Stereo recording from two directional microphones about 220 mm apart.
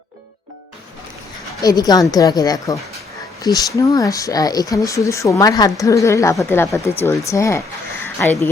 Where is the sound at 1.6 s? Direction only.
15° left (ahead or behind).